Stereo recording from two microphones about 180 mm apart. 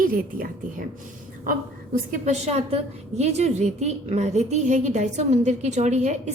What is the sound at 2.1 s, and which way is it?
A woman's voice, 40° right (ahead or behind).